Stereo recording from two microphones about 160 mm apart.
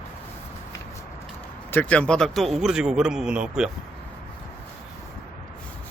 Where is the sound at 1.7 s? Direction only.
10° left (ahead or behind).